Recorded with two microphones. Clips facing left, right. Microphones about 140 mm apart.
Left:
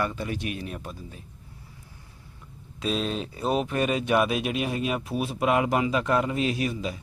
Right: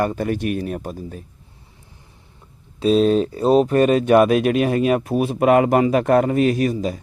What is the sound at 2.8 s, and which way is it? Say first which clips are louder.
Speech: right 13 dB; 40° right (ahead or behind).